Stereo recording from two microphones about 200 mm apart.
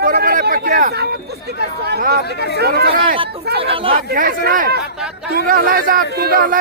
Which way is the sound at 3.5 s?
25° right (ahead or behind).